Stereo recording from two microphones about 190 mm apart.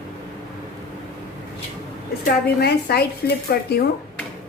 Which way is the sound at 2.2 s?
55° left (ahead or behind).